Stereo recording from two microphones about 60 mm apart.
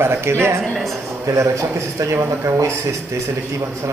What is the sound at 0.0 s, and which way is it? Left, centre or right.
Speech, right.